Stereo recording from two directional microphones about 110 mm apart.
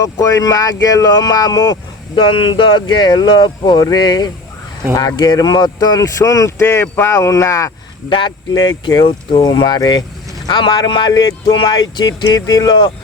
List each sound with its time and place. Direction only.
0.0 s speech: 30° left (ahead or behind)
8.1 s speech: 45° left (ahead or behind)